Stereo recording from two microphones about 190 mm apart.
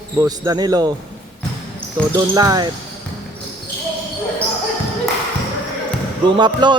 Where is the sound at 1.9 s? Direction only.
15° right (ahead or behind).